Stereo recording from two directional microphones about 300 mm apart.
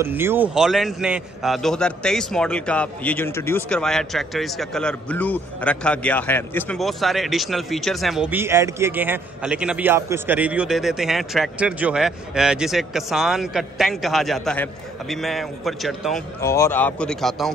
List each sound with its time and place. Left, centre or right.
0.0 s a man's voice: centre